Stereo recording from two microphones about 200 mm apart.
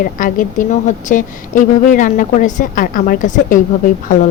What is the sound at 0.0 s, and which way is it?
A woman's voice, 40° left (ahead or behind).